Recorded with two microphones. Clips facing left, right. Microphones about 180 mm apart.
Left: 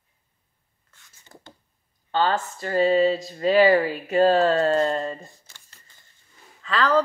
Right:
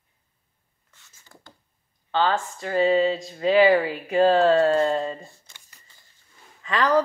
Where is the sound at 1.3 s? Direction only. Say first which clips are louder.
Left 4 dB; 20° left (ahead or behind).